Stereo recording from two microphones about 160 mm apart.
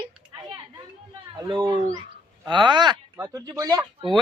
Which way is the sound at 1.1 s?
25° right (ahead or behind).